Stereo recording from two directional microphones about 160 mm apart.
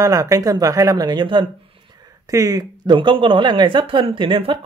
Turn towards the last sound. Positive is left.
turn(degrees=-35)  # may be behind; listen again after turning